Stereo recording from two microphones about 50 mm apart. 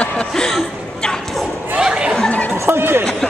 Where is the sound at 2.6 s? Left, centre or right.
Right.